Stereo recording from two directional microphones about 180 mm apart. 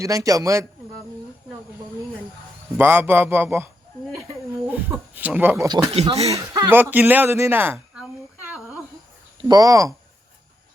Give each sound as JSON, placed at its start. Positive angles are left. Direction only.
{"t": 0.0, "sound": "a man's voice", "side_deg": -20}
{"t": 2.7, "sound": "speech", "side_deg": -10}
{"t": 4.7, "sound": "speech", "side_deg": -10}
{"t": 5.6, "sound": "a man's voice", "side_deg": -25}
{"t": 6.0, "sound": "speech", "side_deg": -35}
{"t": 6.3, "sound": "speech", "side_deg": -15}
{"t": 9.5, "sound": "a man's voice", "side_deg": -20}